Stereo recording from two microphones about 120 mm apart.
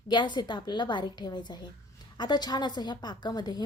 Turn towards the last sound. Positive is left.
turn(degrees=35)  # may be behind; listen again after turning